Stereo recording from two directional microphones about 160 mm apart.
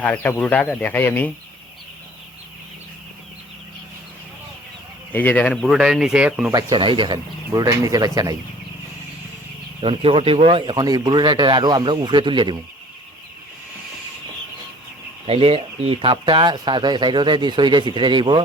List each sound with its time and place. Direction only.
0.0 s speech: 10° left (ahead or behind)
5.1 s speech: 10° left (ahead or behind); by 6.5 s 5° right (ahead or behind)
6.5 s speech: 25° right (ahead or behind)
9.8 s speech: 35° right (ahead or behind)
15.3 s speech: 35° right (ahead or behind)